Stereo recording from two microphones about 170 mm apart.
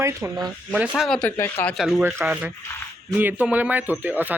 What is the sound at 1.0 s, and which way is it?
Speech, 5° left (ahead or behind).